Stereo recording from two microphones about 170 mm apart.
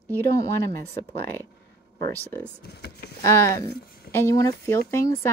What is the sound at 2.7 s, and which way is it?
Speech, 75° left (ahead or behind).